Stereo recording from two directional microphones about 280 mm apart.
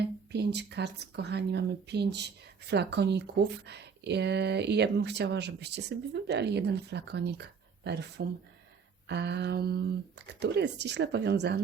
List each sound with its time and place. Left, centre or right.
0.0 s speech: right